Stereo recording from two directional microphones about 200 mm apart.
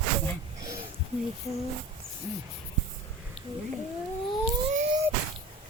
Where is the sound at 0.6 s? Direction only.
20° right (ahead or behind).